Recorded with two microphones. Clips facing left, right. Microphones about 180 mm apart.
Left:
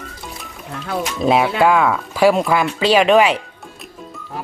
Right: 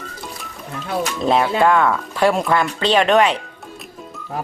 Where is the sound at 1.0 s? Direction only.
5° left (ahead or behind).